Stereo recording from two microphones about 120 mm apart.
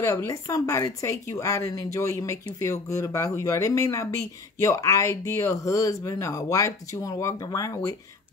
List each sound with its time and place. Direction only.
0.0 s speech: 25° left (ahead or behind)